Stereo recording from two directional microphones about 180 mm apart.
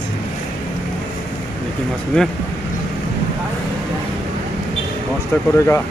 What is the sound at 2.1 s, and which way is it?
Speech, 5° left (ahead or behind).